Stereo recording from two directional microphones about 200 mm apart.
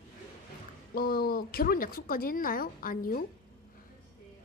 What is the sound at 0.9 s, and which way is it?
A woman's voice, 50° left (ahead or behind).